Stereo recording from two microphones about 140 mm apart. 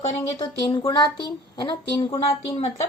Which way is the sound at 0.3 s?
35° left (ahead or behind).